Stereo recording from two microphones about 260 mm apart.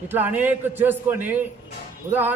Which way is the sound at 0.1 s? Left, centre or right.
Centre.